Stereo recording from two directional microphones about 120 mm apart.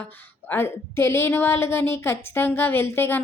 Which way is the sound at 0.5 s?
20° left (ahead or behind).